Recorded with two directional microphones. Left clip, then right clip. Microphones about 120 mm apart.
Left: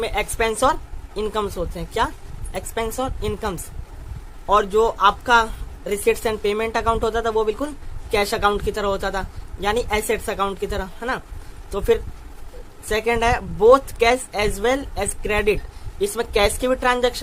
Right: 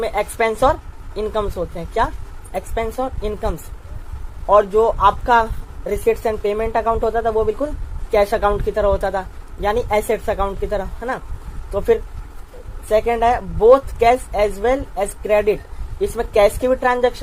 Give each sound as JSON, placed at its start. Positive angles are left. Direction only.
{"t": 0.0, "sound": "a woman's voice", "side_deg": 20}
{"t": 4.4, "sound": "a woman's voice", "side_deg": 35}
{"t": 8.1, "sound": "a woman's voice", "side_deg": 20}
{"t": 12.9, "sound": "a woman's voice", "side_deg": 35}
{"t": 14.0, "sound": "a woman's voice", "side_deg": 30}